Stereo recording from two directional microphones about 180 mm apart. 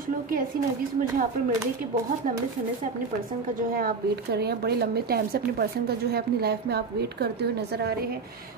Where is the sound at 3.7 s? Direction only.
60° right (ahead or behind).